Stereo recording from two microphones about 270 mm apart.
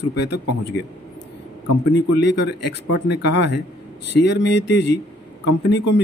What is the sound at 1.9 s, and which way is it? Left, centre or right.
Speech, left.